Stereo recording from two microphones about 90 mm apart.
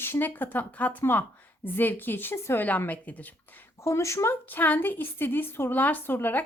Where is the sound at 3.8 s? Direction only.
35° left (ahead or behind).